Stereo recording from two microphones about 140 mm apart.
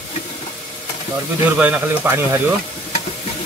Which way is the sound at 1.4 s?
15° right (ahead or behind).